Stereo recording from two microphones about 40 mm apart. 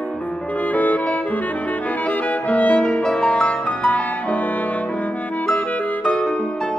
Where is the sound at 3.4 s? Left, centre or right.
Left.